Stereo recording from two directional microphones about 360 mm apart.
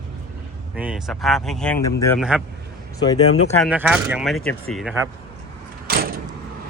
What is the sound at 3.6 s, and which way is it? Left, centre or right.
Speech, centre.